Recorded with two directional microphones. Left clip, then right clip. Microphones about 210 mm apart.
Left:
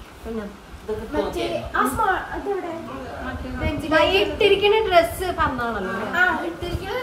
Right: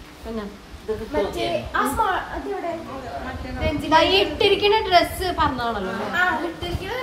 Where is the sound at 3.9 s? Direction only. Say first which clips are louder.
Right 1 dB; 10° right (ahead or behind).